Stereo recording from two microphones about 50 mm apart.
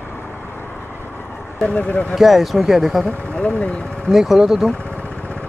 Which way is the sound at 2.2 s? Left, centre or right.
Centre.